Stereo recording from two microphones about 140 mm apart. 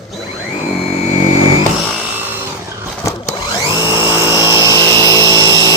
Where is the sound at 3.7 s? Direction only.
25° left (ahead or behind).